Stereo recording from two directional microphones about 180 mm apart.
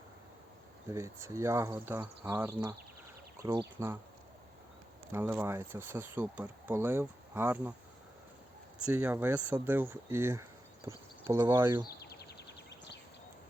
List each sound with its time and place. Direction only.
0.9 s speech: 15° right (ahead or behind)
5.1 s speech: 15° right (ahead or behind)
8.8 s speech: 10° right (ahead or behind)
11.9 s a sound: 65° left (ahead or behind)